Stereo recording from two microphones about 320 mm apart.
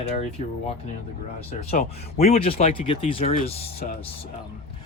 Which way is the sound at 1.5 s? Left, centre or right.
Left.